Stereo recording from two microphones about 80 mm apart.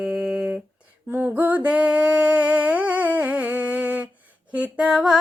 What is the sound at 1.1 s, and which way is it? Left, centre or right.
Music, right.